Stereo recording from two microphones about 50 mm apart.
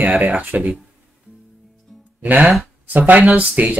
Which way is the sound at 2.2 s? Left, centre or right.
Right.